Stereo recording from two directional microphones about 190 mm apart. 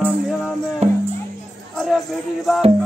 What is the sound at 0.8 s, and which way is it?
Music, 35° right (ahead or behind).